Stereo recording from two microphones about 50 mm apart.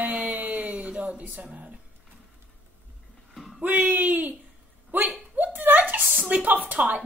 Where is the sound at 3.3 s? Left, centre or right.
Centre.